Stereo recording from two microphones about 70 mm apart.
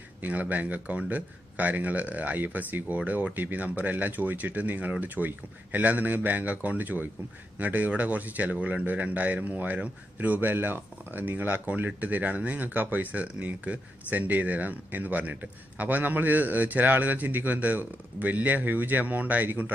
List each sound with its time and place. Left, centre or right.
0.2 s a man's voice: right